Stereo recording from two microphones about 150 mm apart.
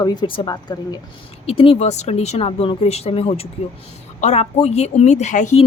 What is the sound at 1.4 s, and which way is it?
Speech, 40° left (ahead or behind).